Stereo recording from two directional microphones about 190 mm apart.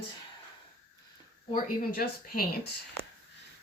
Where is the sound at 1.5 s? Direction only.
50° left (ahead or behind).